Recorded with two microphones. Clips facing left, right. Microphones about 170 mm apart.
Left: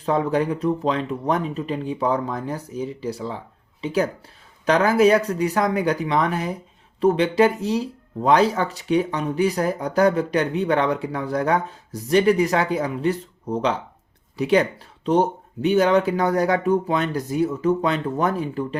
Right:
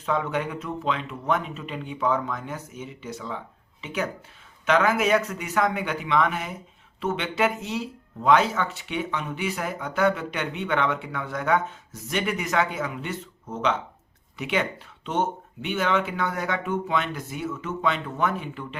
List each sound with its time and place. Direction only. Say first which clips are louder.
0.0 s speech: left 6 dB; 35° left (ahead or behind)